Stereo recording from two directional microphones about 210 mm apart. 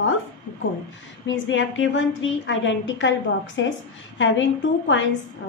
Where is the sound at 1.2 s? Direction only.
60° left (ahead or behind).